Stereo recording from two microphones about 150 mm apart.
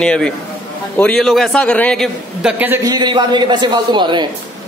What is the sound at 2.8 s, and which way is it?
A man's voice, 30° right (ahead or behind).